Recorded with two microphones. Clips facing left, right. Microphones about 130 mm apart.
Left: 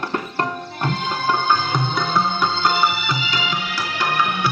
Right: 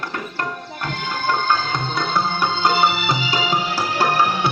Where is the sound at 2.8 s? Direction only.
35° right (ahead or behind).